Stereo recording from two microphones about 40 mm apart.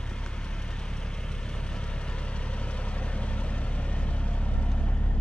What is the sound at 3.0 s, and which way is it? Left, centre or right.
Vehicle, left.